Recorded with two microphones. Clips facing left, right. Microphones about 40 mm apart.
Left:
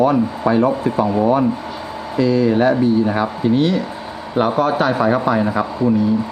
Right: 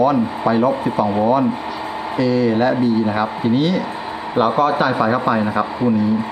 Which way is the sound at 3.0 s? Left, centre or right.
Centre.